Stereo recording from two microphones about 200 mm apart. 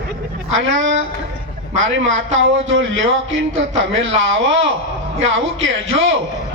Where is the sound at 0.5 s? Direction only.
70° right (ahead or behind).